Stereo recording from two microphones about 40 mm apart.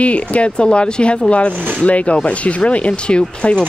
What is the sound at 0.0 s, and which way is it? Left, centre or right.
Speech, left.